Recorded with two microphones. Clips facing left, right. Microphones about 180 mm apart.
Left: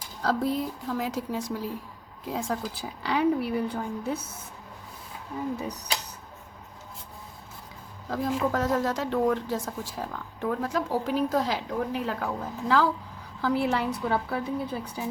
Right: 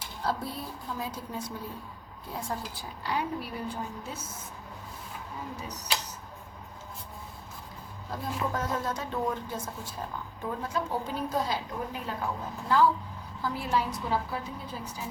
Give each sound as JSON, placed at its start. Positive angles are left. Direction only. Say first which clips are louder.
{"t": 0.2, "sound": "a woman's voice", "louder": "left 7 dB", "side_deg": 90}
{"t": 3.0, "sound": "a woman's voice", "louder": "left 8 dB", "side_deg": 75}
{"t": 8.1, "sound": "speech", "louder": "left 6 dB", "side_deg": 85}
{"t": 13.4, "sound": "a woman's voice", "louder": "left 5 dB", "side_deg": 70}